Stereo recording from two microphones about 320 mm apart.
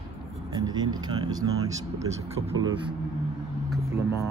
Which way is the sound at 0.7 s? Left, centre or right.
Centre.